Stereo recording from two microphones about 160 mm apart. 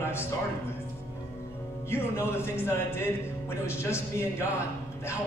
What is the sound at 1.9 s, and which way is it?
A man's voice, 15° left (ahead or behind).